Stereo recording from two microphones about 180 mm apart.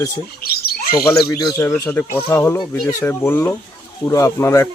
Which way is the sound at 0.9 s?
20° left (ahead or behind).